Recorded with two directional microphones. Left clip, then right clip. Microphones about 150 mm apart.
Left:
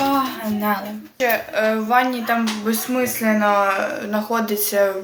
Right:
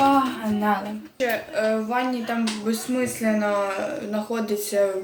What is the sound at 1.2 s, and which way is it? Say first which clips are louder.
Speech: left 5 dB; 25° right (ahead or behind).